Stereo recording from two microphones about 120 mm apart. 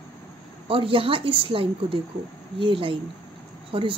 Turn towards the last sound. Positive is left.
turn(degrees=-45)  # may be behind; listen again after turning